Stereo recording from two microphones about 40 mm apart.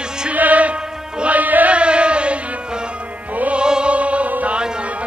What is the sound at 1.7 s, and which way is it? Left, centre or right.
Chant, right.